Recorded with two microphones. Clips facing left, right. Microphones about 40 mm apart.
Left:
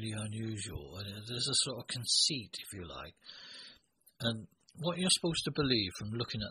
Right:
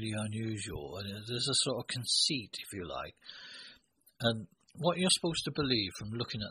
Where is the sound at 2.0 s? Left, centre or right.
Centre.